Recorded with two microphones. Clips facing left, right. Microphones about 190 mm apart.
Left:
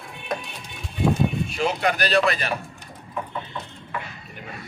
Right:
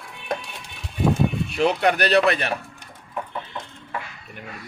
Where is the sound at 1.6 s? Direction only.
60° right (ahead or behind).